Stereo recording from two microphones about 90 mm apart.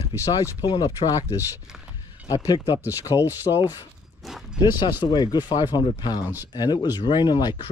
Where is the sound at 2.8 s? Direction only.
20° right (ahead or behind).